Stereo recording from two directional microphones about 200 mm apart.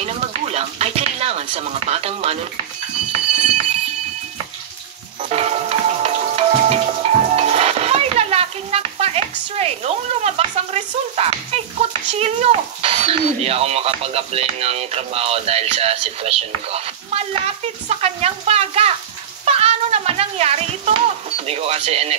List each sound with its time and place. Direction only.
0.0 s speech: 30° right (ahead or behind)
5.3 s music: 30° right (ahead or behind)
12.1 s a child's voice: 30° right (ahead or behind)